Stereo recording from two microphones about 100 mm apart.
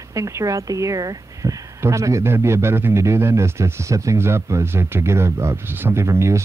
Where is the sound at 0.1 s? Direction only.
35° right (ahead or behind).